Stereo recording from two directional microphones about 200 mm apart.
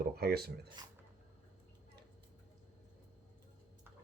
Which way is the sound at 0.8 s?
20° right (ahead or behind).